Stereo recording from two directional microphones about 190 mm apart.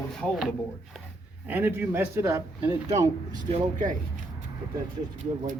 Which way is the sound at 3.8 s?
45° right (ahead or behind).